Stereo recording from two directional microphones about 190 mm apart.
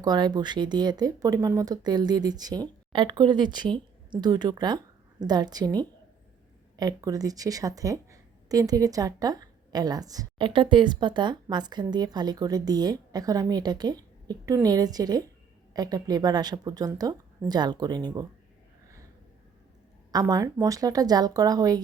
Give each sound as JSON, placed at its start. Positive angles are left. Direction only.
{"t": 0.0, "sound": "a woman's voice", "side_deg": -20}
{"t": 20.1, "sound": "a woman's voice", "side_deg": -20}